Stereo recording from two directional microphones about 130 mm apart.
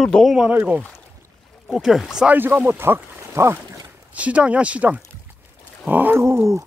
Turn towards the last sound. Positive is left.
turn(degrees=-20)  # may be behind; listen again after turning